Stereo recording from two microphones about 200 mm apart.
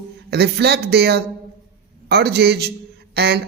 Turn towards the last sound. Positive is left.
turn(degrees=-55)  # may be behind; listen again after turning